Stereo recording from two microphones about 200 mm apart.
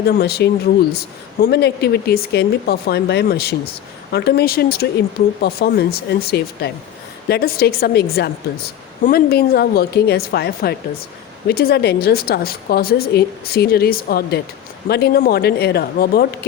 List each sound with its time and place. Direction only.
0.2 s a woman's voice: 55° left (ahead or behind)